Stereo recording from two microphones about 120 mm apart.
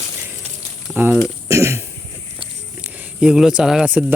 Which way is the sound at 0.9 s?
15° right (ahead or behind).